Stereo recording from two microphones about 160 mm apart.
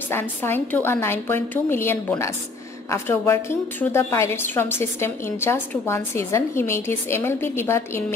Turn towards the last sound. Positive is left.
turn(degrees=15)  # may be behind; listen again after turning